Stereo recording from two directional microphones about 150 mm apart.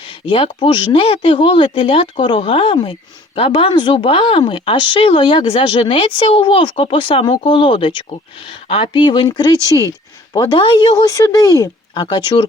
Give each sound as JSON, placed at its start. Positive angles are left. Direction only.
{"t": 0.1, "sound": "speech", "side_deg": 35}